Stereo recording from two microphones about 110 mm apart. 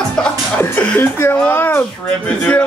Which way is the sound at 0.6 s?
20° left (ahead or behind).